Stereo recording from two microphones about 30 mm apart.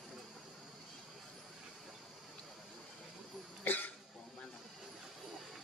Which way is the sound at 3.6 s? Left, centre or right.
Left.